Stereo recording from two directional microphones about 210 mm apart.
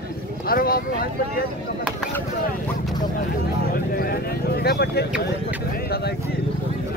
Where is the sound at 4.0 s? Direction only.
45° left (ahead or behind).